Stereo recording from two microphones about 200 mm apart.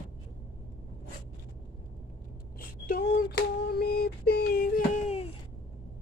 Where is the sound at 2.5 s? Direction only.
45° left (ahead or behind).